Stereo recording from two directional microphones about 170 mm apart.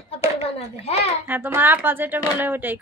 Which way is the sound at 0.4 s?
40° left (ahead or behind).